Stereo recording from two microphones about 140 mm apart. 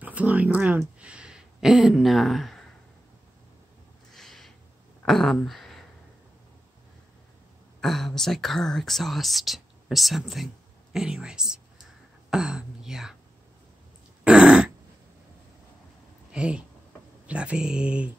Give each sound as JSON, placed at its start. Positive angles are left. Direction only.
{"t": 0.0, "sound": "speech", "side_deg": -10}
{"t": 4.1, "sound": "a sound", "side_deg": 0}
{"t": 7.8, "sound": "speech", "side_deg": 0}
{"t": 14.2, "sound": "dog", "side_deg": -5}
{"t": 16.3, "sound": "speech", "side_deg": -10}